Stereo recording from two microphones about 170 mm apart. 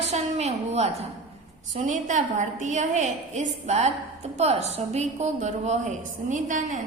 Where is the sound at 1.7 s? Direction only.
45° right (ahead or behind).